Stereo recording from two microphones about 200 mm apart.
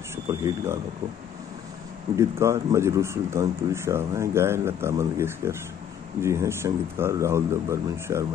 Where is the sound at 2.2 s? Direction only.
15° right (ahead or behind).